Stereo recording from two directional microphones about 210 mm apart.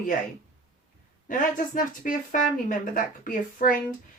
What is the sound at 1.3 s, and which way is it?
Speech, 40° left (ahead or behind).